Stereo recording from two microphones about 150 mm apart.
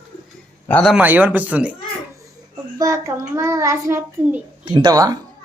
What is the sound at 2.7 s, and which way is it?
Speech, 20° right (ahead or behind).